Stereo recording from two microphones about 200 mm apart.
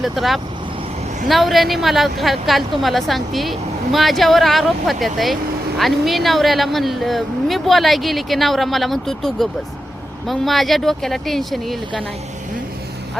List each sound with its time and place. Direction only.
0.0 s a woman's voice: centre (ahead or behind)